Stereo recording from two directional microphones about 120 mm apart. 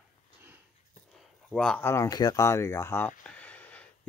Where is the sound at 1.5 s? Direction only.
5° left (ahead or behind).